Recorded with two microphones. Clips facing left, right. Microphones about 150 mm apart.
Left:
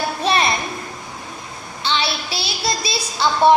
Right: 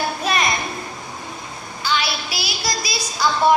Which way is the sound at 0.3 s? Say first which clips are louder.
Left 4 dB; 30° left (ahead or behind).